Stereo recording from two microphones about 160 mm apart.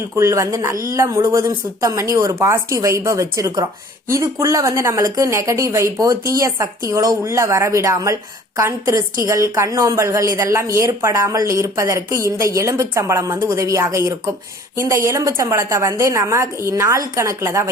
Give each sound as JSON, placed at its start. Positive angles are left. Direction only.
{"t": 0.2, "sound": "a woman's voice", "side_deg": -20}